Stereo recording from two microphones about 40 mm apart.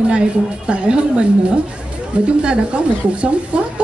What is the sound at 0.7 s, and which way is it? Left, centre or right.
A woman's voice, right.